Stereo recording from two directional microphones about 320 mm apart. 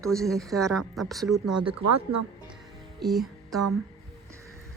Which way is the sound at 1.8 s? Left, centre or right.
Right.